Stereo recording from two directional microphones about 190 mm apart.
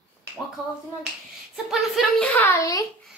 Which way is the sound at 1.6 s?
Centre (ahead or behind).